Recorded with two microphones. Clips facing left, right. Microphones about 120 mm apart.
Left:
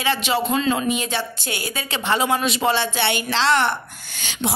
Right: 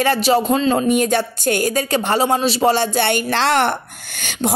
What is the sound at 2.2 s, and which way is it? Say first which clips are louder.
A woman's voice: right 4 dB; 30° right (ahead or behind).